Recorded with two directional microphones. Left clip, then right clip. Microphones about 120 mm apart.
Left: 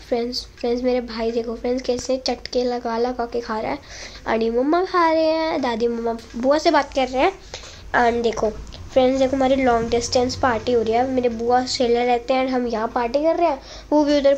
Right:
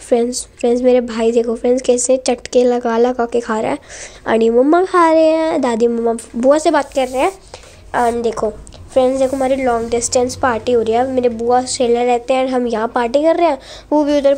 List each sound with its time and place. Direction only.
0.1 s a woman's voice: 65° right (ahead or behind)
4.3 s a woman's voice: 55° right (ahead or behind); by 7.2 s 35° right (ahead or behind)
7.9 s a woman's voice: 20° right (ahead or behind)
9.9 s a woman's voice: 35° right (ahead or behind); by 13.6 s 65° right (ahead or behind)
13.8 s a woman's voice: 30° right (ahead or behind)